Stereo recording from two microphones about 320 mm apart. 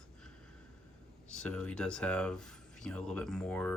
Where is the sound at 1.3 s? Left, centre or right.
Centre.